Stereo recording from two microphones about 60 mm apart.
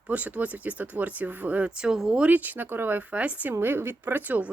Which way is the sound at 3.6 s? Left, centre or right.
Right.